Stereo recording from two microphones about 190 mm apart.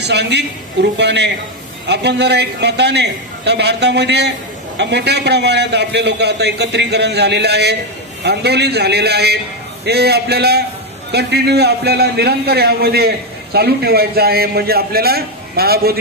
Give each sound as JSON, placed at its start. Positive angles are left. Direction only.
{"t": 0.0, "sound": "a man's voice", "side_deg": -65}